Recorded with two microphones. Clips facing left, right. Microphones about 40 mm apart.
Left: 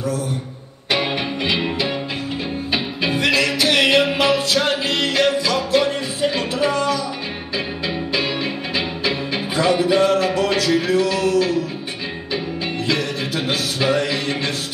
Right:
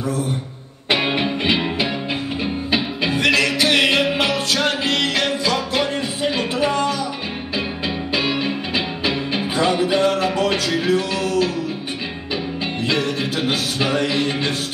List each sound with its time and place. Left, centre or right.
0.8 s music: right
3.2 s music: right
8.7 s music: right
10.8 s a sound: right
13.9 s speech: right